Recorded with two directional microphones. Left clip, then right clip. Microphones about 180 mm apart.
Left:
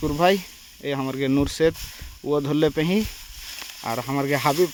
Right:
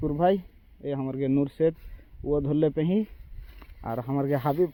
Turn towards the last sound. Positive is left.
turn(degrees=25)  # may be behind; listen again after turning